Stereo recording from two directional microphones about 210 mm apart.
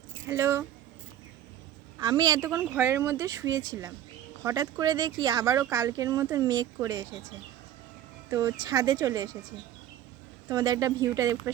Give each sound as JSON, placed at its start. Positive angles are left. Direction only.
{"t": 0.3, "sound": "speech", "side_deg": -15}
{"t": 2.0, "sound": "speech", "side_deg": -20}
{"t": 8.3, "sound": "speech", "side_deg": -15}
{"t": 10.5, "sound": "speech", "side_deg": -20}